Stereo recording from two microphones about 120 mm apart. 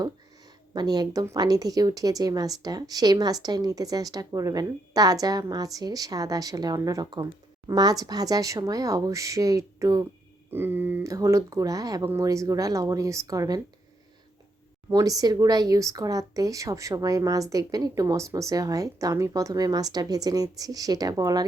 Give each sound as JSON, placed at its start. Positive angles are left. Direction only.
{"t": 0.7, "sound": "a woman's voice", "side_deg": -35}
{"t": 10.5, "sound": "speech", "side_deg": -20}
{"t": 14.8, "sound": "speech", "side_deg": -30}